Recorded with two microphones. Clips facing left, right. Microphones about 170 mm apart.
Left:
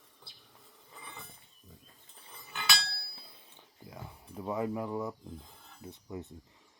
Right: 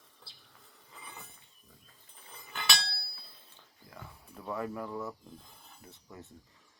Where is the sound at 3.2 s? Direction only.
15° left (ahead or behind).